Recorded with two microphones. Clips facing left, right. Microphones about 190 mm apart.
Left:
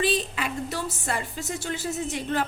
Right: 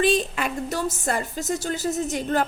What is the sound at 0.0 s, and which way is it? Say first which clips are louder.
A woman's voice: right 4 dB; 50° right (ahead or behind).